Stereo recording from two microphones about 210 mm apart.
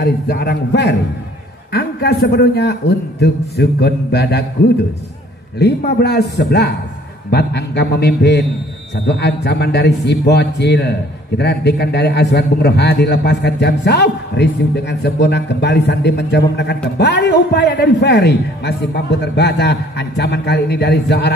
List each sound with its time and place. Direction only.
0.0 s a man's voice: 50° left (ahead or behind)
5.6 s a man's voice: 55° left (ahead or behind)